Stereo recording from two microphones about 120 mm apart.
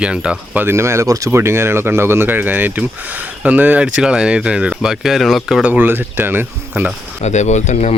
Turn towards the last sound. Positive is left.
turn(degrees=75)  # may be behind; listen again after turning